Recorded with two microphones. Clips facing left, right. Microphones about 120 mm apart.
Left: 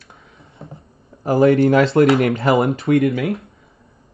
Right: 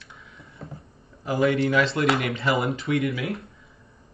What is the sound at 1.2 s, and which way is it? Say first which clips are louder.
Speech: left 9 dB; 45° left (ahead or behind).